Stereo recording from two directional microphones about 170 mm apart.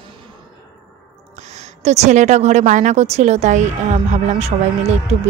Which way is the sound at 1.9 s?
40° right (ahead or behind).